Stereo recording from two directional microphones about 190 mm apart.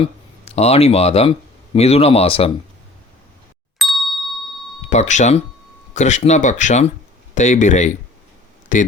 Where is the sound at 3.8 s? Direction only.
Centre (ahead or behind).